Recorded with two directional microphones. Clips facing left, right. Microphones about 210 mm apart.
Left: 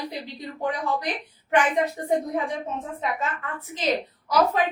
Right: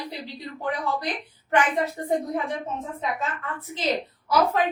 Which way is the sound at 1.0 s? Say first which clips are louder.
Even; 15° left (ahead or behind).